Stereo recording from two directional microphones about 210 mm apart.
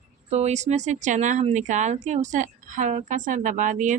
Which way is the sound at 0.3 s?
30° right (ahead or behind).